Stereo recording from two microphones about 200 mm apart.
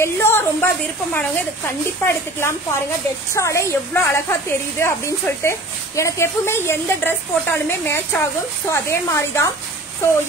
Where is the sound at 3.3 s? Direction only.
15° left (ahead or behind).